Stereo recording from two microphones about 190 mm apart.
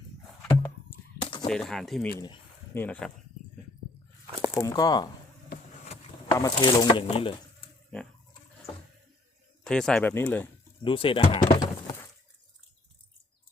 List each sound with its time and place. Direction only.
1.5 s speech: 5° left (ahead or behind)
2.1 s speech: 20° left (ahead or behind)
2.7 s speech: 10° left (ahead or behind)
4.3 s a sound: 15° right (ahead or behind)
4.6 s speech: 20° left (ahead or behind)
6.3 s speech: 20° left (ahead or behind)
9.6 s speech: 5° left (ahead or behind)
10.8 s speech: 25° left (ahead or behind)